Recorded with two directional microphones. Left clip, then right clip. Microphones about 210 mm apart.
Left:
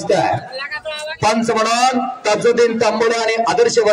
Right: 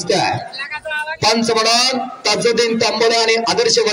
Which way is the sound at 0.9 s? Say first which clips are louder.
Right 1 dB; 35° left (ahead or behind).